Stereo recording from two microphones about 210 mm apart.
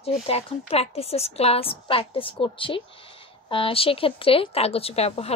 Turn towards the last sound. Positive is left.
turn(degrees=30)  # may be behind; listen again after turning